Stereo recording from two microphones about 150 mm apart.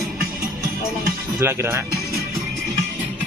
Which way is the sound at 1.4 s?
15° right (ahead or behind).